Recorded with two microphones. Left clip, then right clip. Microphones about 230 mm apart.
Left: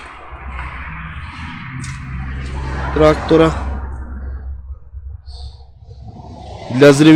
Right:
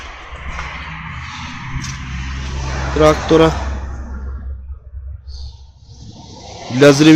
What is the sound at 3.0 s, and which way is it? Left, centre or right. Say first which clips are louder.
Speech: even; centre.